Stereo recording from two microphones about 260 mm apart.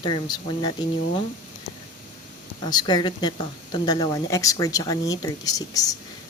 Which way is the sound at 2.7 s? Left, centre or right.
Centre.